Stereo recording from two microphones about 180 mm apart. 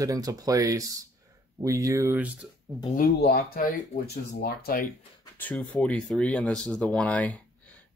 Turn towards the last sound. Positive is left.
turn(degrees=5)  # may be behind; listen again after turning